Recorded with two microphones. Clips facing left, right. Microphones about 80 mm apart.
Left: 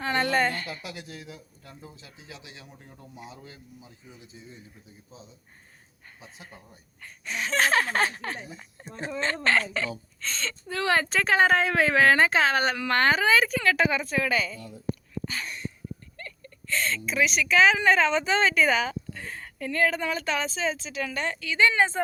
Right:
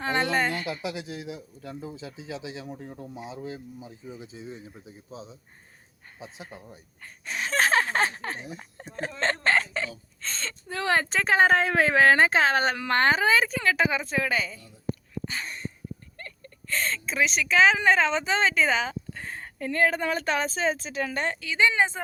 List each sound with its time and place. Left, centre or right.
0.0 s a woman's voice: right
0.9 s speech: right
1.3 s speech: centre
3.2 s speech: right
4.4 s speech: right
6.1 s speech: centre
7.0 s speech: right
8.5 s speech: right
10.8 s speech: right
15.3 s a sound: right
16.1 s a woman's voice: right
21.0 s speech: right